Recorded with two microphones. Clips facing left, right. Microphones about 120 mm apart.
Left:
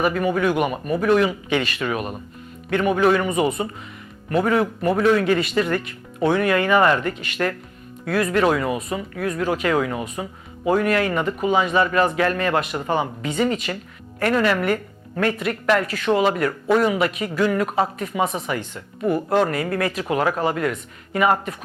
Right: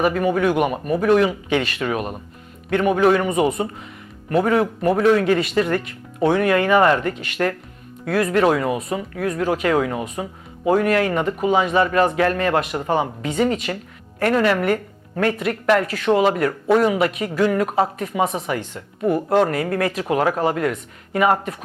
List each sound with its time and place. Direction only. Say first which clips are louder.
0.0 s speech: right 2 dB; 45° right (ahead or behind)
7.2 s speech: right 2 dB; 55° right (ahead or behind)
11.1 s speech: right 2 dB; 35° right (ahead or behind)
11.4 s a woman's voice: right 1 dB; 50° right (ahead or behind)